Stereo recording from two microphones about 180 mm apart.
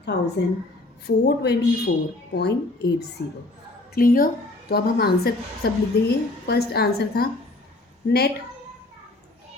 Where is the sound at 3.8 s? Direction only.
55° left (ahead or behind).